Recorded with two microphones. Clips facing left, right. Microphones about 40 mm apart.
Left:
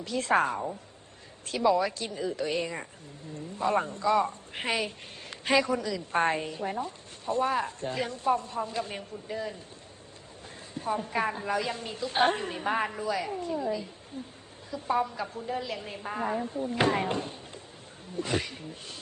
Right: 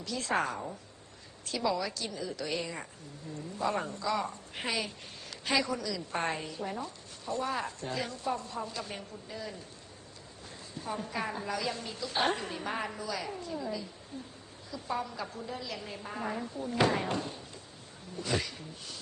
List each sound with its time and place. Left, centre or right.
0.0 s a woman's voice: left
1.7 s a woman's voice: left
10.9 s a woman's voice: left